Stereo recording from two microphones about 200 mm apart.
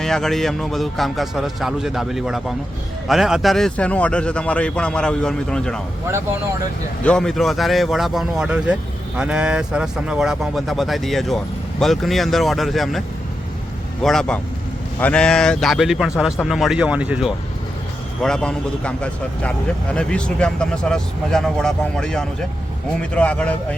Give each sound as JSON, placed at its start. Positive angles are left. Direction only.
{"t": 0.0, "sound": "speech", "side_deg": 0}
{"t": 7.0, "sound": "speech", "side_deg": 5}
{"t": 14.0, "sound": "a man's voice", "side_deg": 0}